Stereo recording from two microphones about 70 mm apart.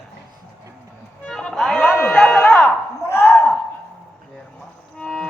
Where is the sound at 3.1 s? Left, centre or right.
Left.